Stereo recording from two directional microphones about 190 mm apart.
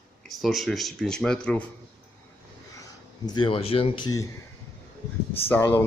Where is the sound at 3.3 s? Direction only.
25° left (ahead or behind).